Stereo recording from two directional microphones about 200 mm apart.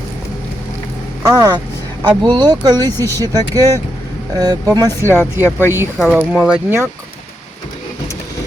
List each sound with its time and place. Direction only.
1.2 s speech: 20° right (ahead or behind)
5.1 s speech: 10° left (ahead or behind)
6.0 s speech: 5° right (ahead or behind)